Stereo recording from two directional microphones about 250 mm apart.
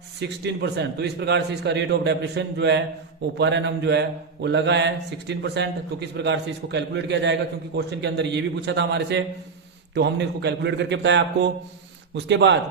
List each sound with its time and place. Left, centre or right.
0.2 s speech: right